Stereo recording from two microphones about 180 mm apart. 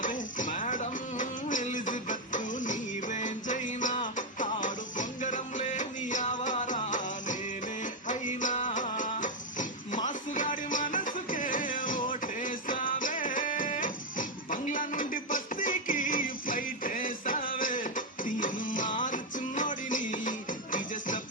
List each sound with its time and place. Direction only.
0.0 s music: 45° left (ahead or behind)